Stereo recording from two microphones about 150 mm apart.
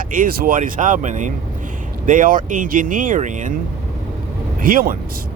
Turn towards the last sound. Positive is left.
turn(degrees=-70)  # may be behind; listen again after turning